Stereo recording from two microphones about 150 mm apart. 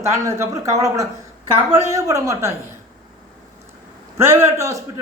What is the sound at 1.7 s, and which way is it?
Speech, 20° right (ahead or behind).